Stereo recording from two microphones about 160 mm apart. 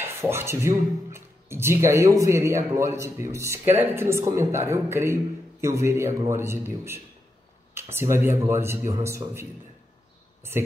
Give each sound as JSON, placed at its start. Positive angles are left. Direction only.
{"t": 0.0, "sound": "a man's voice", "side_deg": -15}